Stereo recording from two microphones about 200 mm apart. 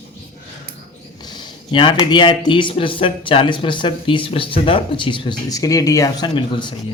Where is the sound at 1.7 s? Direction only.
25° left (ahead or behind).